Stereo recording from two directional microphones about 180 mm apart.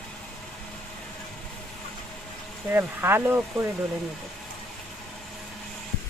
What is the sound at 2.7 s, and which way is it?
Speech, 10° right (ahead or behind).